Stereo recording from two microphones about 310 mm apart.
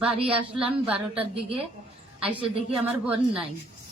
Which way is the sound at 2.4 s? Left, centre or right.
Centre.